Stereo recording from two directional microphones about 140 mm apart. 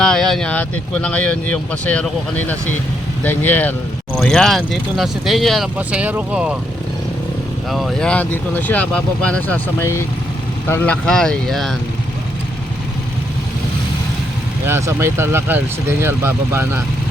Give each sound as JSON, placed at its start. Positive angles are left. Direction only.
{"t": 0.0, "sound": "vehicle", "side_deg": 5}
{"t": 1.0, "sound": "speech", "side_deg": 10}
{"t": 7.7, "sound": "speech", "side_deg": 0}
{"t": 10.7, "sound": "speech", "side_deg": 5}
{"t": 14.7, "sound": "speech", "side_deg": -20}